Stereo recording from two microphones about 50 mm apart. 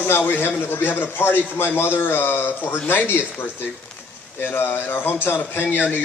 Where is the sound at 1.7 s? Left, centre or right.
Left.